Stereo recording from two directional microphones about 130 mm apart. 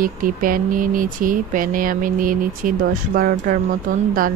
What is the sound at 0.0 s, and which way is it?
Speech, 90° right.